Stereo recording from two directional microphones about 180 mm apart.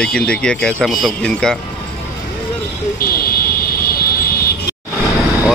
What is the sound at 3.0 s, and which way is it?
Speech, 55° left (ahead or behind).